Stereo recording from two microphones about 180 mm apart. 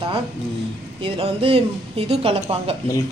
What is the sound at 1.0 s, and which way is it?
A woman's voice, 30° right (ahead or behind).